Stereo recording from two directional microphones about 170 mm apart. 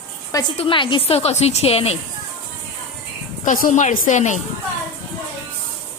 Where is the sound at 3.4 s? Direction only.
50° left (ahead or behind).